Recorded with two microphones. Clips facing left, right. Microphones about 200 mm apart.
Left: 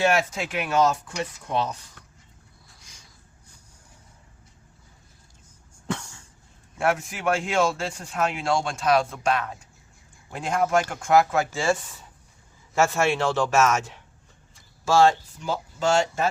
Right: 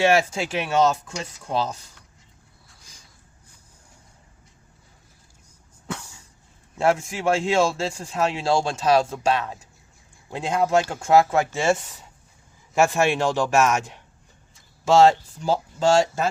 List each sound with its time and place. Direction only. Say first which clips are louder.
0.0 s speech: right 3 dB; 30° right (ahead or behind)
5.9 s cough: left 3 dB; 5° right (ahead or behind)
6.7 s speech: right 3 dB; 30° right (ahead or behind)
12.7 s speech: right 2 dB; 15° right (ahead or behind)
15.0 s speech: right 3 dB; 30° right (ahead or behind)